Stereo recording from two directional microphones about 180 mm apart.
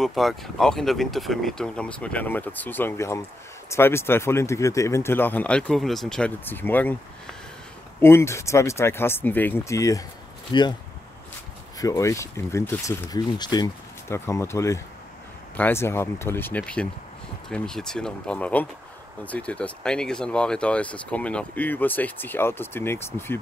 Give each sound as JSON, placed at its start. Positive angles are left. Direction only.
{"t": 0.0, "sound": "speech", "side_deg": 0}
{"t": 8.0, "sound": "speech", "side_deg": 15}
{"t": 11.8, "sound": "speech", "side_deg": 20}